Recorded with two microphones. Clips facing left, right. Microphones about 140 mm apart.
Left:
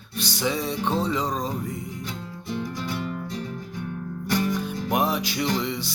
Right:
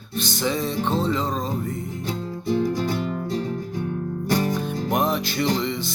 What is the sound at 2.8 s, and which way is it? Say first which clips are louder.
Music: right 5 dB; 45° right (ahead or behind).